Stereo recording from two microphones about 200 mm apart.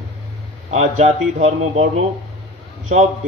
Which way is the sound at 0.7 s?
35° right (ahead or behind).